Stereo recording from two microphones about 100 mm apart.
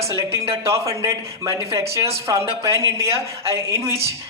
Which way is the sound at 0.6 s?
30° right (ahead or behind).